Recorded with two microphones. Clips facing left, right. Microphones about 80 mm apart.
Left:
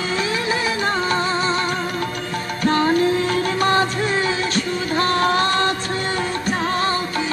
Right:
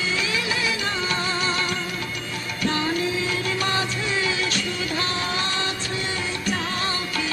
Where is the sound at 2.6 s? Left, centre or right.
Left.